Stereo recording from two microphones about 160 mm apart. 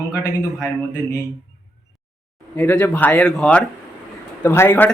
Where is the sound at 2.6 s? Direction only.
10° left (ahead or behind).